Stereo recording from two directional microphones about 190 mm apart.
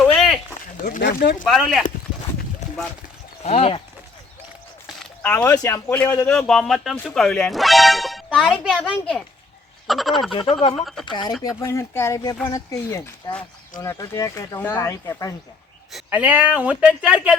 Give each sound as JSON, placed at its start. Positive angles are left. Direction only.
{"t": 0.0, "sound": "a sound", "side_deg": 5}
{"t": 1.2, "sound": "speech", "side_deg": 50}
{"t": 1.5, "sound": "speech", "side_deg": 0}
{"t": 3.4, "sound": "speech", "side_deg": 35}
{"t": 4.9, "sound": "speech", "side_deg": 10}
{"t": 10.3, "sound": "speech", "side_deg": 25}
{"t": 10.7, "sound": "speech", "side_deg": 0}
{"t": 11.0, "sound": "speech", "side_deg": 25}
{"t": 16.0, "sound": "speech", "side_deg": -10}